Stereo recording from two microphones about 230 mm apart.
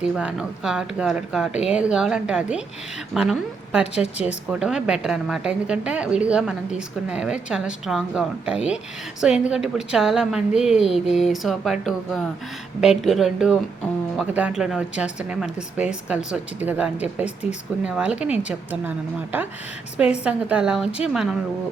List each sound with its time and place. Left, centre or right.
0.0 s a woman's voice: centre